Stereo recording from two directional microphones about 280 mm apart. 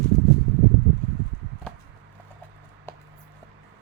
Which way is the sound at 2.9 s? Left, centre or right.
Centre.